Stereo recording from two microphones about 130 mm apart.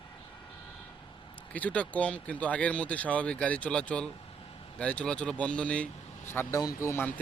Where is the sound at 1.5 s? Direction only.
10° left (ahead or behind).